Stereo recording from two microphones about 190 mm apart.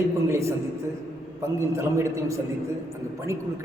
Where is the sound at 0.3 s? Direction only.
15° right (ahead or behind).